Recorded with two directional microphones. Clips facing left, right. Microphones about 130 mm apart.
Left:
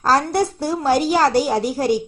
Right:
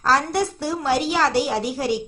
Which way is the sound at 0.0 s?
40° left (ahead or behind).